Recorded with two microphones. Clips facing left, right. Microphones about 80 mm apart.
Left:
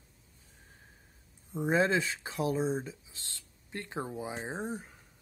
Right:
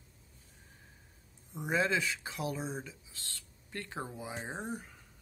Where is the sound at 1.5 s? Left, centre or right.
Left.